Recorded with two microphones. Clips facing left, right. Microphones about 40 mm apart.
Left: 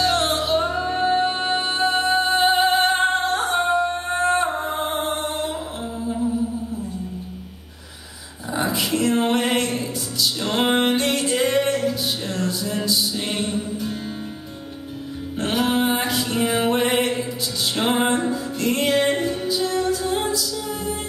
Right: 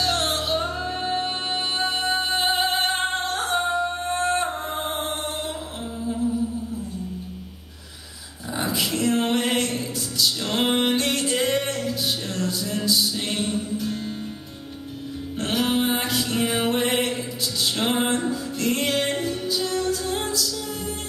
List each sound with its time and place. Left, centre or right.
0.0 s music: centre
8.5 s music: centre
15.3 s music: centre